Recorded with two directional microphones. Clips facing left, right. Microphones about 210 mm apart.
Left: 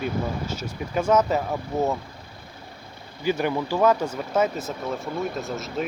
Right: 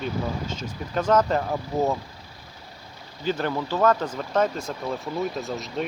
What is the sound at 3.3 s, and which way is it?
Speech, 10° left (ahead or behind).